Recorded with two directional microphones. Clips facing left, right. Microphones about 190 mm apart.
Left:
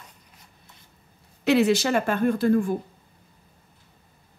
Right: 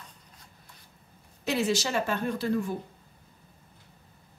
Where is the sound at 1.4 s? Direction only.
65° left (ahead or behind).